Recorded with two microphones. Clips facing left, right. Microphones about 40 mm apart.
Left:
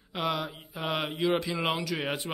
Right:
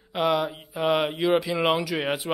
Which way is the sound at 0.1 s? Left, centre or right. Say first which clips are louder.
Right 7 dB; centre.